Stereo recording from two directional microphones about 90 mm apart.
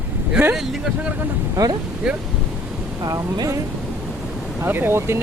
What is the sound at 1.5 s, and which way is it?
Speech, 40° right (ahead or behind).